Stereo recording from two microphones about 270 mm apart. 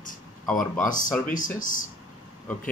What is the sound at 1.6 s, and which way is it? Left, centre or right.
Speech, left.